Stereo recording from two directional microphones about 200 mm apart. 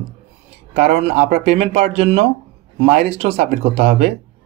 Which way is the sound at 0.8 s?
30° right (ahead or behind).